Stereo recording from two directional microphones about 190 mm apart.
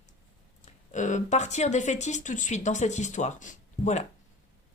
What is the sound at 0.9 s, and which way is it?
Speech, 40° left (ahead or behind).